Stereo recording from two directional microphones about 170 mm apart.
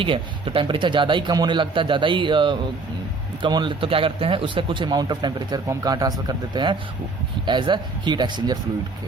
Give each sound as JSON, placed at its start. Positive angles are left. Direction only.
{"t": 0.0, "sound": "speech", "side_deg": -30}